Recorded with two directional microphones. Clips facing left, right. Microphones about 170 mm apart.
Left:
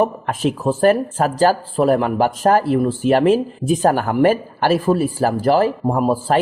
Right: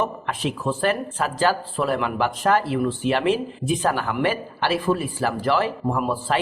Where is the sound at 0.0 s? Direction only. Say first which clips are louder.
Left 7 dB; 40° left (ahead or behind).